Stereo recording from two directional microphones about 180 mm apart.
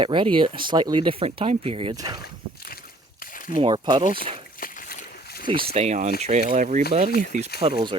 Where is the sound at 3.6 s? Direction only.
25° right (ahead or behind).